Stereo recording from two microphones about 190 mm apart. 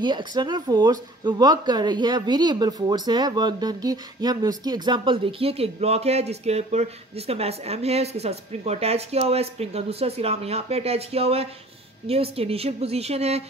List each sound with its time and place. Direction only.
0.0 s speech: 25° right (ahead or behind)